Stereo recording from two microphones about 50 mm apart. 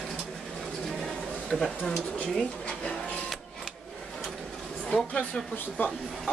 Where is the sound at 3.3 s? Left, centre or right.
Centre.